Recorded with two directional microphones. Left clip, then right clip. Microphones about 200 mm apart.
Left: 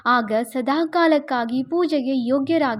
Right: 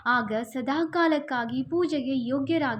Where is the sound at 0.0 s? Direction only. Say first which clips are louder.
Left 6 dB; 40° left (ahead or behind).